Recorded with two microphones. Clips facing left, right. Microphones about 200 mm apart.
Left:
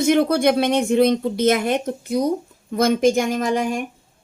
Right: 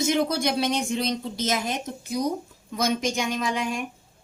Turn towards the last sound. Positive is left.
turn(degrees=50)  # may be behind; listen again after turning